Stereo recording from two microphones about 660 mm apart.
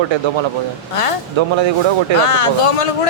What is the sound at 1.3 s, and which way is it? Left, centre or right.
Speech, right.